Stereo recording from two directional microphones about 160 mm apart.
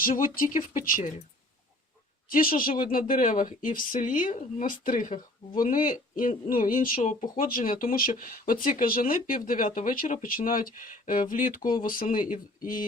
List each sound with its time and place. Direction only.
0.0 s speech: 60° left (ahead or behind)
2.3 s speech: 60° left (ahead or behind)